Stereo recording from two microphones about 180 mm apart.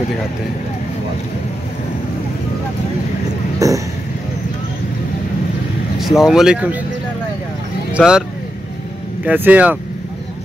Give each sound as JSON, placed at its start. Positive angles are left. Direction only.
{"t": 3.5, "sound": "speech", "side_deg": -20}
{"t": 5.9, "sound": "speech", "side_deg": 0}
{"t": 7.9, "sound": "speech", "side_deg": -5}
{"t": 9.2, "sound": "speech", "side_deg": -10}